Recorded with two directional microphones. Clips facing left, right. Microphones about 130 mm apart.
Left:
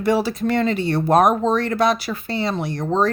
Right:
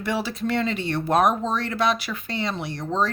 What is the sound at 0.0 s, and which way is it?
Speech, 40° left (ahead or behind).